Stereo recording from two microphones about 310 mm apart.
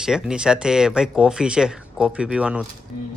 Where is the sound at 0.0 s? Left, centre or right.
Centre.